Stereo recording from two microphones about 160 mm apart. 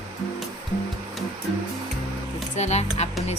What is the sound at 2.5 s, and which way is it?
Speech, 45° left (ahead or behind).